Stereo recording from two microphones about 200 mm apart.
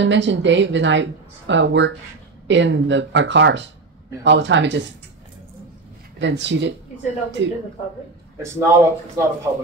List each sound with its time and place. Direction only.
0.0 s a woman's voice: 65° right (ahead or behind)
6.1 s a woman's voice: 65° right (ahead or behind)
8.4 s speech: 15° right (ahead or behind)